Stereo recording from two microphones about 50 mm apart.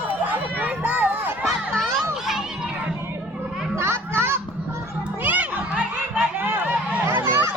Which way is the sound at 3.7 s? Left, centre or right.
Right.